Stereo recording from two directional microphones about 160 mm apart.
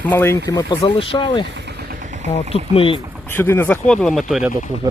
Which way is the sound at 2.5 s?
35° left (ahead or behind).